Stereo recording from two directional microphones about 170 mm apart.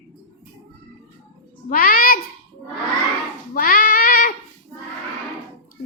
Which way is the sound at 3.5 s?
60° left (ahead or behind).